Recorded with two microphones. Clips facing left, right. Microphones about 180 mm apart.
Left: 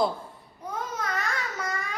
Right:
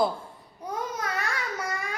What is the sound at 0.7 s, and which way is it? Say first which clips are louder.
Babbling: right 1 dB; 10° right (ahead or behind).